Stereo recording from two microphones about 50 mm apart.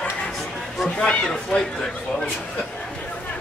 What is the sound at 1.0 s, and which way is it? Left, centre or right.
Speech, centre.